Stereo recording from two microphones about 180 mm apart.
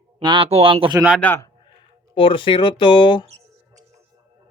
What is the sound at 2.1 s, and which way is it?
Speech, 30° left (ahead or behind).